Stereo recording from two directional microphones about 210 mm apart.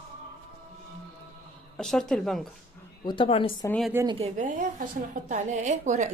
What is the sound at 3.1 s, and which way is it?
Speech, 25° left (ahead or behind).